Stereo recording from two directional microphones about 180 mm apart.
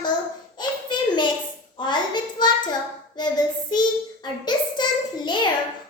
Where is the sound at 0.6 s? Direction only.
25° left (ahead or behind).